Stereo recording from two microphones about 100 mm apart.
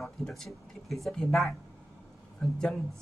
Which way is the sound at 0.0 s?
5° left (ahead or behind).